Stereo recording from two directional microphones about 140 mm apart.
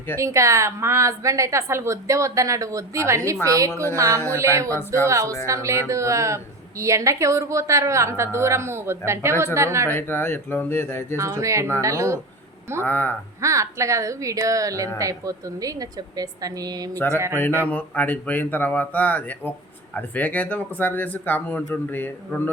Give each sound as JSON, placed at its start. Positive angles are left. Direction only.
{"t": 0.2, "sound": "a woman's voice", "side_deg": -20}
{"t": 9.9, "sound": "speech", "side_deg": 15}
{"t": 11.2, "sound": "a woman's voice", "side_deg": -25}
{"t": 12.8, "sound": "speech", "side_deg": 15}
{"t": 13.4, "sound": "a woman's voice", "side_deg": -20}
{"t": 16.9, "sound": "speech", "side_deg": 15}